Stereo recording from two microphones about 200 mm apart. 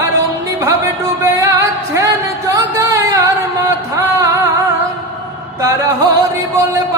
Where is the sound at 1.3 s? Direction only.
15° right (ahead or behind).